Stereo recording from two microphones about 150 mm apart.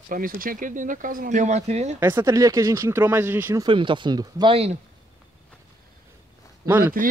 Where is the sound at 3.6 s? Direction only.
35° right (ahead or behind).